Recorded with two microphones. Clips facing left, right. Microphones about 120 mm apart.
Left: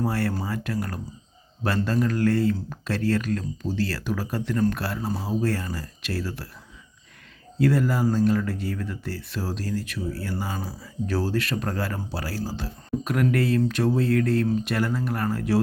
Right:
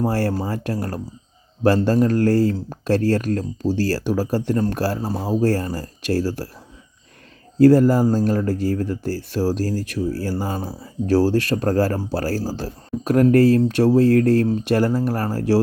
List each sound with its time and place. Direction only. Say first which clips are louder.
0.0 s speech: right 5 dB; 35° right (ahead or behind)
7.6 s speech: right 9 dB; 40° right (ahead or behind)